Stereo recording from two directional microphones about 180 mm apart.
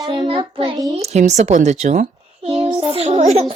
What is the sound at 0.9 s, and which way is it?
A child's voice, 40° right (ahead or behind).